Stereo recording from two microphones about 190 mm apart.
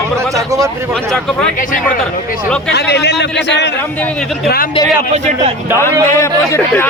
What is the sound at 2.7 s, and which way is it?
A man's voice, 60° left (ahead or behind).